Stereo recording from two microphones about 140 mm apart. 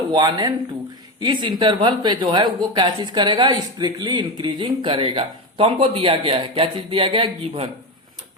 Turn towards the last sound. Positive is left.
turn(degrees=-40)  # may be behind; listen again after turning